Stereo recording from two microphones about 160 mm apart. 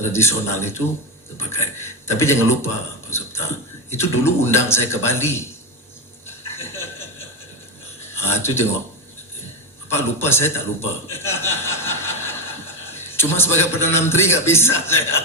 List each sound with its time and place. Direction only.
0.0 s a man's voice: 15° left (ahead or behind)
3.1 s a sound: 15° left (ahead or behind)
3.9 s a man's voice: 15° left (ahead or behind)
6.2 s stir: 15° left (ahead or behind)
8.1 s speech: 15° left (ahead or behind)
9.9 s a man's voice: 15° left (ahead or behind)
11.1 s chuckle: 15° left (ahead or behind)
13.1 s a man's voice: 15° left (ahead or behind)